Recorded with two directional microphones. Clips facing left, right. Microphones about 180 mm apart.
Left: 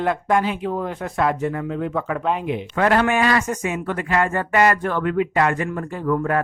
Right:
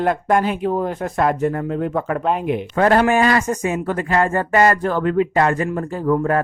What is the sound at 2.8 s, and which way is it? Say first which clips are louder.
Speech: right 3 dB; 35° right (ahead or behind).